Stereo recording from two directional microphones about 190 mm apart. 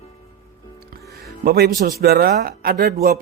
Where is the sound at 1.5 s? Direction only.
55° right (ahead or behind).